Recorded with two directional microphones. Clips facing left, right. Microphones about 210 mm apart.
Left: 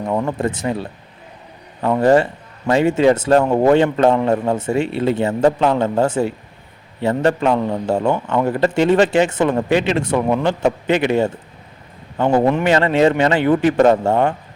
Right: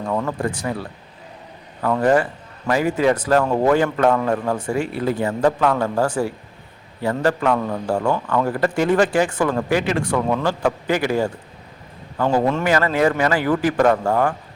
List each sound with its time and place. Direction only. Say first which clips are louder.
0.0 s a man's voice: left 3 dB; 20° left (ahead or behind)